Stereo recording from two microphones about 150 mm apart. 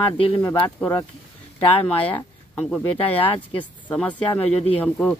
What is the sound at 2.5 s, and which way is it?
Speech, 5° left (ahead or behind).